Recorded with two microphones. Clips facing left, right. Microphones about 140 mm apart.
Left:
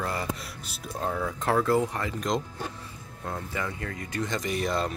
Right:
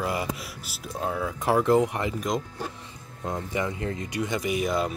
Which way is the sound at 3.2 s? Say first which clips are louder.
Right 4 dB; 20° right (ahead or behind).